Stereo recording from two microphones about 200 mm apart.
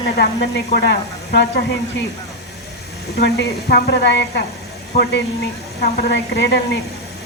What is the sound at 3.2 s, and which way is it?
Speech, 55° left (ahead or behind).